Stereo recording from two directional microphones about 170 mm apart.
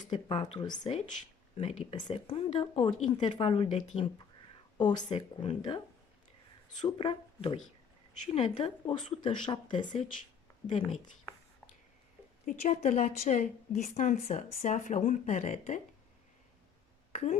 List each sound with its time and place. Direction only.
0.1 s speech: 25° left (ahead or behind)
0.9 s speech: 35° left (ahead or behind)
6.8 s speech: 30° left (ahead or behind)
10.7 s speech: 40° left (ahead or behind)
12.4 s a woman's voice: 40° left (ahead or behind)
17.1 s a sound: 45° left (ahead or behind)